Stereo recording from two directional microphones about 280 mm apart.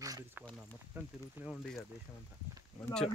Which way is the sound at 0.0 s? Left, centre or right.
Centre.